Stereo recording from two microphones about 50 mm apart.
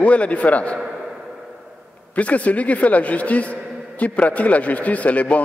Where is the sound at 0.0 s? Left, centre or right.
Left.